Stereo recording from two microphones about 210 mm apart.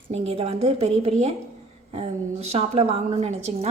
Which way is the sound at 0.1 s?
30° right (ahead or behind).